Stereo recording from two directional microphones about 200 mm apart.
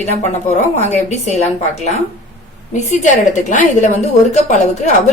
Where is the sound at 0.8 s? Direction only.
35° left (ahead or behind).